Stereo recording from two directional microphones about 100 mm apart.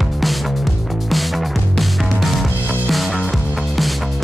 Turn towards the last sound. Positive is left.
turn(degrees=0)  # may be behind; listen again after turning